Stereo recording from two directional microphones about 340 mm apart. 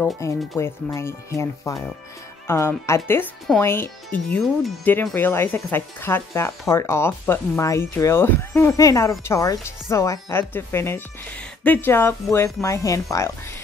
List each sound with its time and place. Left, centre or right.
0.0 s speech: centre